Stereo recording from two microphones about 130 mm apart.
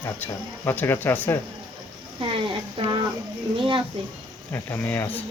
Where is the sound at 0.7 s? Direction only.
15° left (ahead or behind).